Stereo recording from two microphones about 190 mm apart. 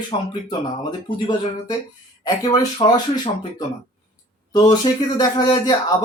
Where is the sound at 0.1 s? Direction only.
25° left (ahead or behind).